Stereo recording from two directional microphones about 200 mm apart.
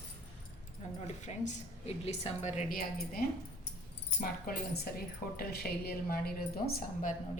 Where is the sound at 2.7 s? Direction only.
45° left (ahead or behind).